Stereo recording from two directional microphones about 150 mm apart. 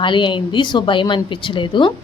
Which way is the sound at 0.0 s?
30° left (ahead or behind).